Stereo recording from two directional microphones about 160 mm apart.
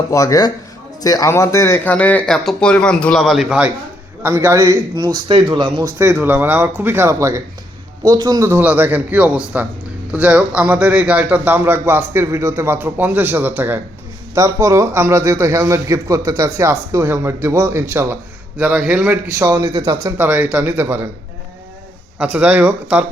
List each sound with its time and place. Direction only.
0.1 s speech: 20° left (ahead or behind); by 3.7 s 5° right (ahead or behind)
4.2 s a man's voice: 15° right (ahead or behind)
6.0 s a man's voice: 15° right (ahead or behind)
19.4 s a man's voice: 20° right (ahead or behind)
20.1 s a man's voice: 10° right (ahead or behind)
22.2 s a man's voice: 10° right (ahead or behind)